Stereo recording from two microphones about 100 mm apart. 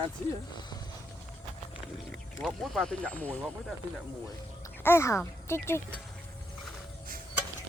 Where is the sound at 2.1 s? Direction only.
5° left (ahead or behind).